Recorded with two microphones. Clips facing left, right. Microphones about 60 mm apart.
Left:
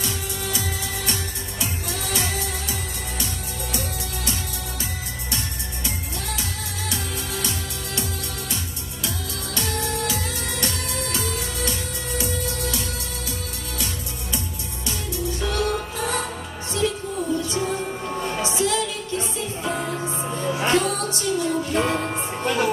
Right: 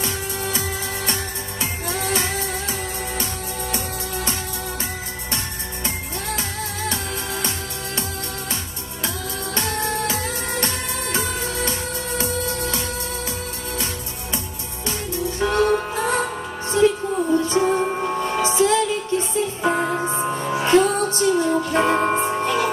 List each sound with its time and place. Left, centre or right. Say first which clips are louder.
0.0 s music: right 3 dB; right
6.9 s music: right 3 dB; right
9.6 s music: right 2 dB; right
14.9 s music: right 3 dB; right